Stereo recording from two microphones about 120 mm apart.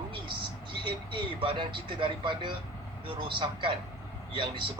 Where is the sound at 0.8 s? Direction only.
45° right (ahead or behind).